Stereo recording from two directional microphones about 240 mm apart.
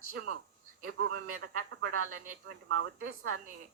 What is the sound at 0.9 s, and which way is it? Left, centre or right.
Speech, right.